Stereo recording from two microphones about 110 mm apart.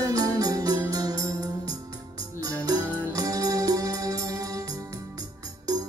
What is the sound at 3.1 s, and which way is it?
Music, 35° right (ahead or behind).